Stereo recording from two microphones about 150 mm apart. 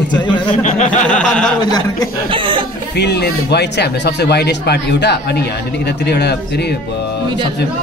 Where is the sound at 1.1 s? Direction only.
5° left (ahead or behind).